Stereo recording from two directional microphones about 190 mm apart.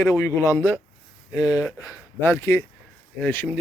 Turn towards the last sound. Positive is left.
turn(degrees=10)  # may be behind; listen again after turning